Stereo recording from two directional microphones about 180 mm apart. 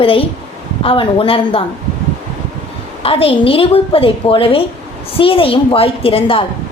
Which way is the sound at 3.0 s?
30° left (ahead or behind).